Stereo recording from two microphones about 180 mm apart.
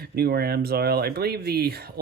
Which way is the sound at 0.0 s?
60° right (ahead or behind).